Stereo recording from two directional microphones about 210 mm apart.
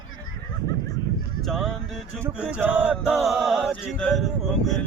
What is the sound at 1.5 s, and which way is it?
Music, centre (ahead or behind).